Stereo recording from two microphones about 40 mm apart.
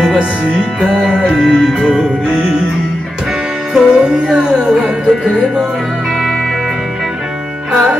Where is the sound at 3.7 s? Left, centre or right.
Centre.